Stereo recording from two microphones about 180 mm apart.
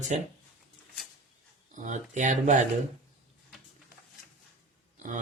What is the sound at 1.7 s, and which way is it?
Speech, 45° right (ahead or behind).